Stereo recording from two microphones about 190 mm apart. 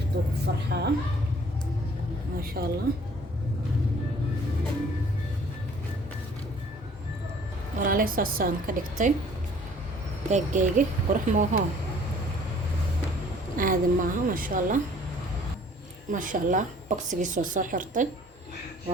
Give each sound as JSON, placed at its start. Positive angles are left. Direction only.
{"t": 0.4, "sound": "a woman's voice", "side_deg": -60}
{"t": 2.4, "sound": "speech", "side_deg": -50}
{"t": 7.8, "sound": "speech", "side_deg": -45}
{"t": 10.2, "sound": "speech", "side_deg": -40}
{"t": 13.6, "sound": "speech", "side_deg": -45}
{"t": 16.1, "sound": "speech", "side_deg": -45}